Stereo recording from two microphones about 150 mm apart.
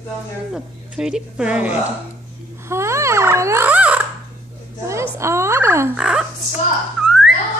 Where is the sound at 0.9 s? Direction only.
5° right (ahead or behind).